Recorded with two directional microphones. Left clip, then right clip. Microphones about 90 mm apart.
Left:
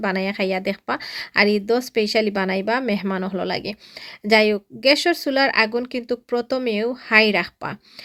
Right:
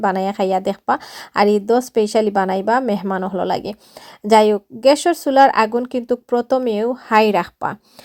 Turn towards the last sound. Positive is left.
turn(degrees=-40)  # may be behind; listen again after turning